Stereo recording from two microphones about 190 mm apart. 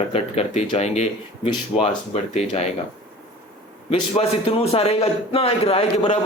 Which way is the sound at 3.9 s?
30° left (ahead or behind).